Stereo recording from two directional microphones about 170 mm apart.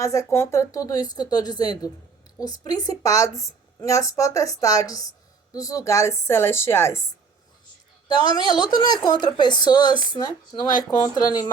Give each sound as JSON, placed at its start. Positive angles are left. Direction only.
{"t": 0.0, "sound": "a woman's voice", "side_deg": 20}